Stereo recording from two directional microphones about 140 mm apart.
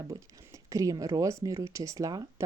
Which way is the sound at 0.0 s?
25° right (ahead or behind).